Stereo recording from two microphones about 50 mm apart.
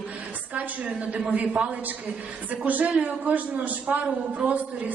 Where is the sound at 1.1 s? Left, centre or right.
Right.